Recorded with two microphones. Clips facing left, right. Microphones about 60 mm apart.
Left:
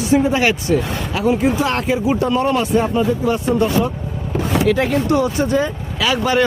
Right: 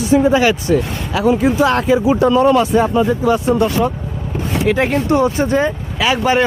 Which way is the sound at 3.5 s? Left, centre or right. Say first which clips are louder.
Right 1 dB; right.